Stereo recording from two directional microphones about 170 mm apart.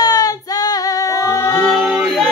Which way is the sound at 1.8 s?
5° right (ahead or behind).